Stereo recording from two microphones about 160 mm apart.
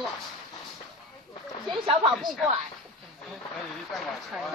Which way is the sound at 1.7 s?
30° right (ahead or behind).